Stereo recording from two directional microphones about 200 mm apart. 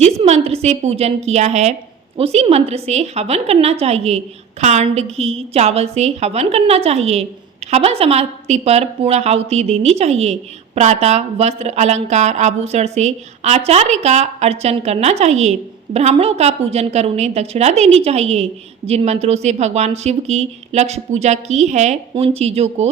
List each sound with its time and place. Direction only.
0.0 s a woman's voice: 30° right (ahead or behind)